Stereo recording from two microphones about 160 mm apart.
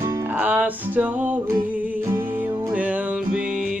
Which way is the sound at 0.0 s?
15° right (ahead or behind).